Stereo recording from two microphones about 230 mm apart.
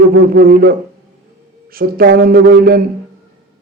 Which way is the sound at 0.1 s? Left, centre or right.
Right.